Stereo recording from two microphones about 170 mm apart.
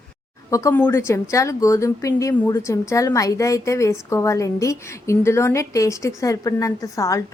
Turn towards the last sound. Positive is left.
turn(degrees=20)  # may be behind; listen again after turning